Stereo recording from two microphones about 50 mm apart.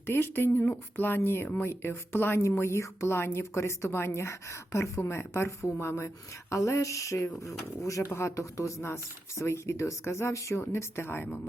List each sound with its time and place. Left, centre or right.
0.0 s speech: left
2.4 s speech: left
4.9 s speech: left
6.5 s a sound: left
8.1 s speech: left